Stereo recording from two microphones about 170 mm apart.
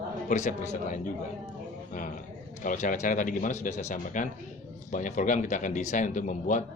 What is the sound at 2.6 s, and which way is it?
A man's voice, 50° left (ahead or behind).